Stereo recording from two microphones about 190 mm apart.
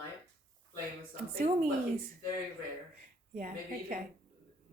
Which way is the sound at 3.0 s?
45° right (ahead or behind).